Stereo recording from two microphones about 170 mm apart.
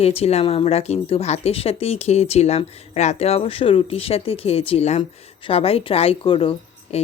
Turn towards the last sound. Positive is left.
turn(degrees=35)  # may be behind; listen again after turning